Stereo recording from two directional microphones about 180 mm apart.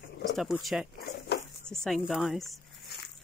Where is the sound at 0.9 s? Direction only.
60° left (ahead or behind).